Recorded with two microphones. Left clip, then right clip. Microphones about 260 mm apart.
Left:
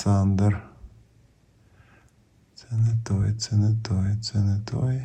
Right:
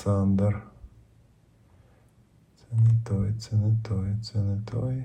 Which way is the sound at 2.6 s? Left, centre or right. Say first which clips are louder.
Right 1 dB; left.